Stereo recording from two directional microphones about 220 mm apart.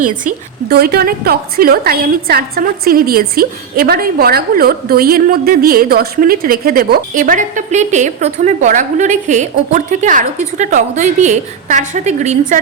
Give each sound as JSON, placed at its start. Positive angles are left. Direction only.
{"t": 0.7, "sound": "a woman's voice", "side_deg": -45}